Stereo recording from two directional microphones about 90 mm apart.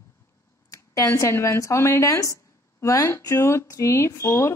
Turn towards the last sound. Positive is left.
turn(degrees=30)  # may be behind; listen again after turning